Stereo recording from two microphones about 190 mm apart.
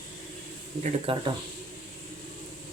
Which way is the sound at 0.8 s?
25° right (ahead or behind).